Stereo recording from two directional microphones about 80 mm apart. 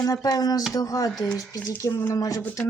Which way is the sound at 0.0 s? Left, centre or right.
Left.